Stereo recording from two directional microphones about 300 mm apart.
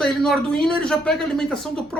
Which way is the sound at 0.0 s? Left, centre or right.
Centre.